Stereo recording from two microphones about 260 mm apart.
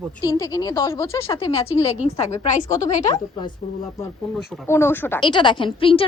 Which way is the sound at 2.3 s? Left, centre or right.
Centre.